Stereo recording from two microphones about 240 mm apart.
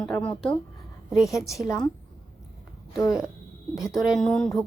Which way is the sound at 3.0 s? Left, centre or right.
Centre.